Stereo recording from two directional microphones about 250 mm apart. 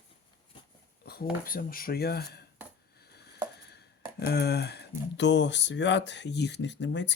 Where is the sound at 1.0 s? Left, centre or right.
Left.